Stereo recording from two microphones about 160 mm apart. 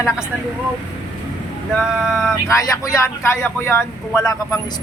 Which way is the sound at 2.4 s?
20° left (ahead or behind).